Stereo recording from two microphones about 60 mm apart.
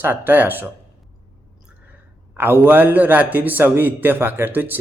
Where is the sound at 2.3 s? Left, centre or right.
Right.